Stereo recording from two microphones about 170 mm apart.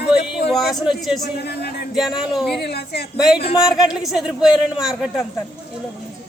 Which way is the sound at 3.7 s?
Centre (ahead or behind).